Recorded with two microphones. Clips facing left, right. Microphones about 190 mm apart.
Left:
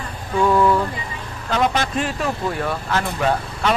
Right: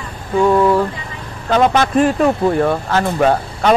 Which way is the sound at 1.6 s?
50° right (ahead or behind).